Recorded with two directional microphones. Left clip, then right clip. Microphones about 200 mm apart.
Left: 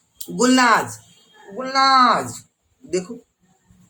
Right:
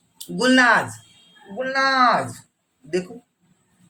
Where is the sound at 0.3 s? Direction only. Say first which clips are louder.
Even; 20° left (ahead or behind).